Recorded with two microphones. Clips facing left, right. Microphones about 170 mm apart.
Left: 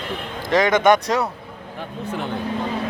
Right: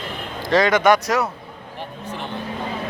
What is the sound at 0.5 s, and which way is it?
Speech, 20° left (ahead or behind).